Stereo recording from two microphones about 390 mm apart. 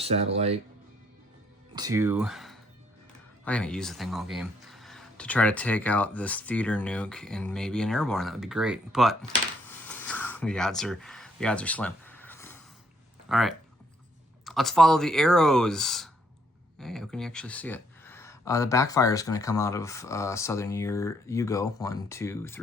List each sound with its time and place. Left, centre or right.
0.0 s speech: centre
1.7 s speech: centre
9.8 s a sound: centre
13.2 s speech: centre